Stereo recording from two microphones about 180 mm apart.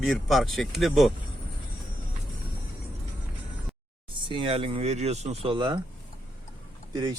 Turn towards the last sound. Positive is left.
turn(degrees=-25)  # may be behind; listen again after turning